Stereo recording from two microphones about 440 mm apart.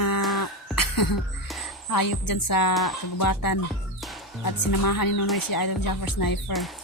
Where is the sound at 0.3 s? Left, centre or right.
Left.